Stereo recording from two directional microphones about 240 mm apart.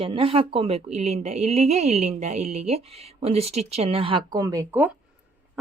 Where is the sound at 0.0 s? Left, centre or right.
Right.